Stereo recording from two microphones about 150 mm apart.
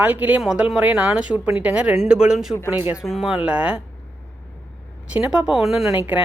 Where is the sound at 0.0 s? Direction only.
10° right (ahead or behind).